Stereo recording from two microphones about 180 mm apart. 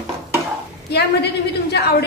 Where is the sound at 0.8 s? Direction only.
65° left (ahead or behind).